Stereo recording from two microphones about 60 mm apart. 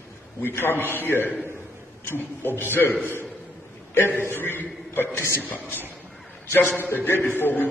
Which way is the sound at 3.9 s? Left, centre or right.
Left.